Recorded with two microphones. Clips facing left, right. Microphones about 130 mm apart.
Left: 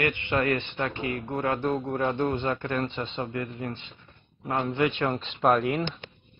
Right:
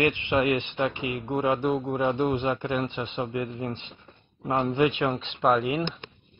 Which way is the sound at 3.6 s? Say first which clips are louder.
Right 2 dB; 20° right (ahead or behind).